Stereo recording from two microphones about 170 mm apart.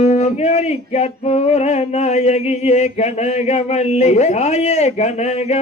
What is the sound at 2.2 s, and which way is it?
Speech, 40° left (ahead or behind).